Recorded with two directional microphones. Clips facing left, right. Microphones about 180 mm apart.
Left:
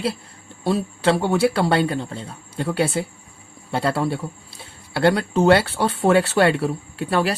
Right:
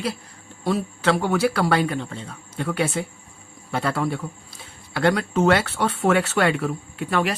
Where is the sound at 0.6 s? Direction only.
30° left (ahead or behind).